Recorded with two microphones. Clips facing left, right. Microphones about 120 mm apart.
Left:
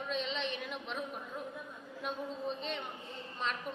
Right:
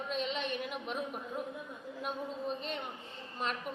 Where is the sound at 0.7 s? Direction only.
5° right (ahead or behind).